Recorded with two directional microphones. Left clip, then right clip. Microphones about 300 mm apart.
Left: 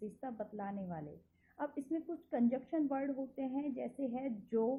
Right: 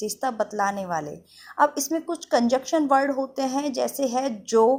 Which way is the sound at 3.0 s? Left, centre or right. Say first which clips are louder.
Right 17 dB; right.